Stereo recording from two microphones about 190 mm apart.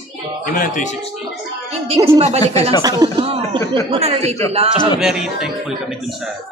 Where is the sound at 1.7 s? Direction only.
30° right (ahead or behind).